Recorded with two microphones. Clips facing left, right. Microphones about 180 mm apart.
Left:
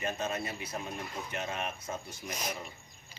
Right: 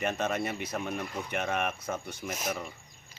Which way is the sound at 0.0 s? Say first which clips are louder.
Right 4 dB; 70° right (ahead or behind).